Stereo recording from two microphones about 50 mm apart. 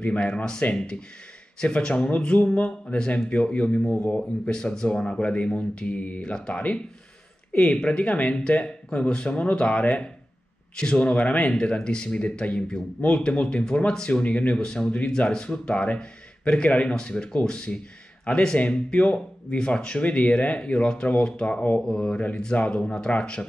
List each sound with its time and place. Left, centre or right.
0.0 s speech: centre